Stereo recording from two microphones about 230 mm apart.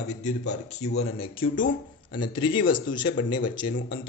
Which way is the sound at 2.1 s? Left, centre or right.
Left.